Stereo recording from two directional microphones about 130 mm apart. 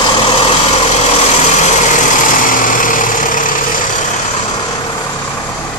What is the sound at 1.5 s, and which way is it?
Lawn mower, 65° left (ahead or behind).